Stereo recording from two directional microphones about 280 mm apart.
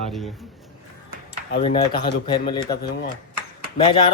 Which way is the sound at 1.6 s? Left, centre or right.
Centre.